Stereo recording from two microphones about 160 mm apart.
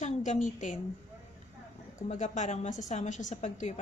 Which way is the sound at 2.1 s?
50° left (ahead or behind).